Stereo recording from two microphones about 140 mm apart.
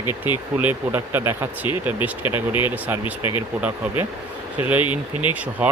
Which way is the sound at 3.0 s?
35° left (ahead or behind).